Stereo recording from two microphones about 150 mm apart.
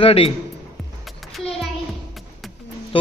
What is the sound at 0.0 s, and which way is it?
Speech, 40° left (ahead or behind).